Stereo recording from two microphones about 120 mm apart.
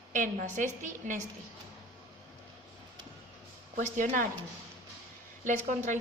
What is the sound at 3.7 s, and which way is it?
Speech, 90° right.